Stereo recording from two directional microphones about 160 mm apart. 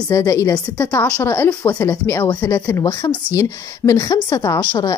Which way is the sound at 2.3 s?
25° left (ahead or behind).